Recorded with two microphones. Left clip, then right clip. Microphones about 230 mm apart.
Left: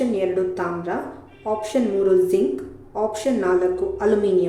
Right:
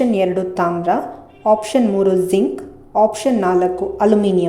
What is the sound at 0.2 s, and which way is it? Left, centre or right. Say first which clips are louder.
A woman's voice: right 5 dB; right.